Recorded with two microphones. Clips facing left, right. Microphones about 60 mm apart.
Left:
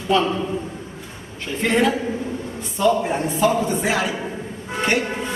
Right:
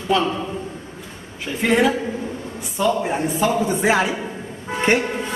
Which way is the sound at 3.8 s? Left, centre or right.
Right.